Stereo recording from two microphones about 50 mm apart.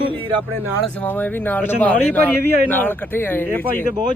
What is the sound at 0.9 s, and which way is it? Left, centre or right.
A man's voice, left.